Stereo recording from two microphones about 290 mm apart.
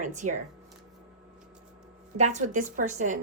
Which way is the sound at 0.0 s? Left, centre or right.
Right.